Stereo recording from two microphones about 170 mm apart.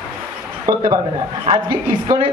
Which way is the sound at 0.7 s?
20° right (ahead or behind).